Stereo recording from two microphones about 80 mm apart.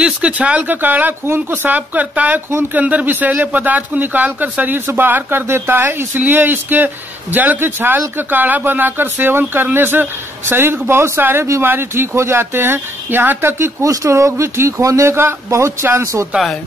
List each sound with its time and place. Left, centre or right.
0.0 s speech: centre; by 16.1 s right
16.3 s speech: centre